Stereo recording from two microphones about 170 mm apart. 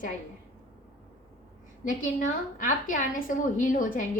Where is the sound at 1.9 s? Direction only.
50° left (ahead or behind).